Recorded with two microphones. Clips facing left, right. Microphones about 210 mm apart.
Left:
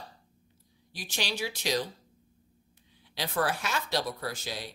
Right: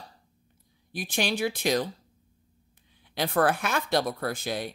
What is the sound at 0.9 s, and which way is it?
Speech, 55° right (ahead or behind).